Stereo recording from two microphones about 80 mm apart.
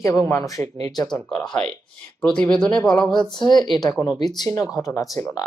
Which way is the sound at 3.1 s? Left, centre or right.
Left.